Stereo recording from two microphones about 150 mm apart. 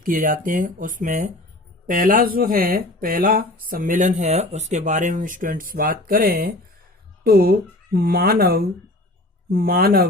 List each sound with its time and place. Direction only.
0.0 s speech: 65° right (ahead or behind)